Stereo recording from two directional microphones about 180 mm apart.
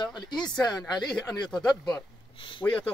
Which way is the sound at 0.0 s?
25° left (ahead or behind).